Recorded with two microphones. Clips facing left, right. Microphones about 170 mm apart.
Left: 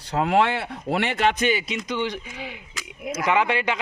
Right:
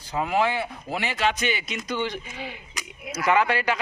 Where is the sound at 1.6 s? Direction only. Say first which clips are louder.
Left 3 dB; 30° left (ahead or behind).